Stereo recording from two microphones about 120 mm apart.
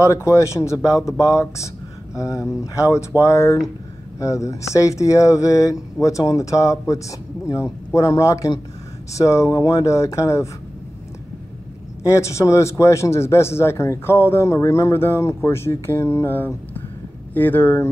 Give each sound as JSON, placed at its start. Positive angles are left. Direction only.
{"t": 0.1, "sound": "a man's voice", "side_deg": 25}
{"t": 12.1, "sound": "a man's voice", "side_deg": 25}